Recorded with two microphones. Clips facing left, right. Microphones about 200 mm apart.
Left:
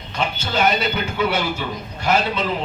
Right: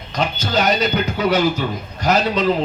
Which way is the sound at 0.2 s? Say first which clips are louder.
Right 1 dB; 40° right (ahead or behind).